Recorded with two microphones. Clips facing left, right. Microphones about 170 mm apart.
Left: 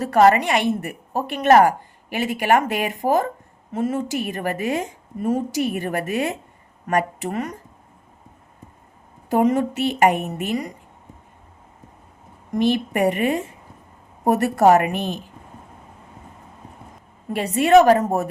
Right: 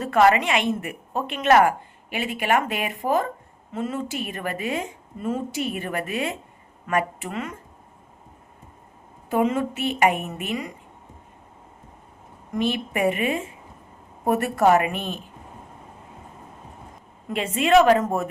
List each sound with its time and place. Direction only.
0.0 s a woman's voice: 40° left (ahead or behind)
9.3 s a woman's voice: 40° left (ahead or behind)
12.9 s a woman's voice: 45° left (ahead or behind)
17.2 s a woman's voice: 40° left (ahead or behind)